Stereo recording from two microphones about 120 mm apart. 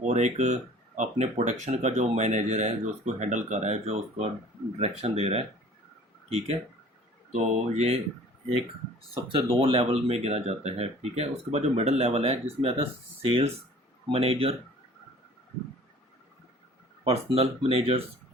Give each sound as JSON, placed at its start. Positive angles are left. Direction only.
{"t": 0.0, "sound": "speech", "side_deg": -75}
{"t": 7.3, "sound": "speech", "side_deg": -65}
{"t": 9.6, "sound": "speech", "side_deg": -50}
{"t": 17.0, "sound": "speech", "side_deg": -55}